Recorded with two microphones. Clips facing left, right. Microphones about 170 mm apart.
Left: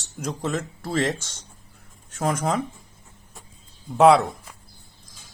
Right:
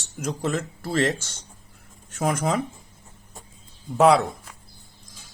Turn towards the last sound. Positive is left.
turn(degrees=0)  # may be behind; listen again after turning